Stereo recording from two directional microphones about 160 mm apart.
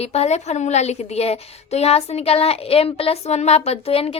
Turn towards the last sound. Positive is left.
turn(degrees=35)  # may be behind; listen again after turning